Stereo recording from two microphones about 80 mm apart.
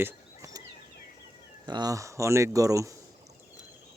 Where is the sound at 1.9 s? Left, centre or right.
Right.